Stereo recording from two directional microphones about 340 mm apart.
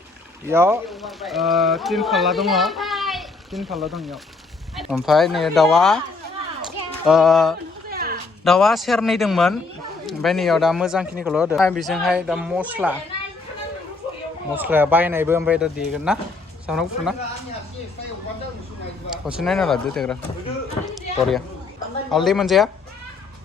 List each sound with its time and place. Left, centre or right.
0.4 s speech: centre
7.1 s speech: centre
7.9 s a sound: right
8.4 s speech: centre
14.5 s speech: centre
19.1 s speech: centre
20.9 s a sound: centre
22.1 s speech: centre